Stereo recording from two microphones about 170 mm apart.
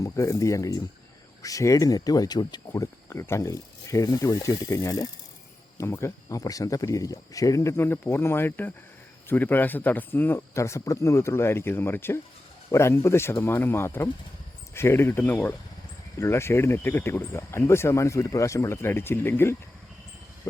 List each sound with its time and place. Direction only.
0.0 s speech: 20° left (ahead or behind)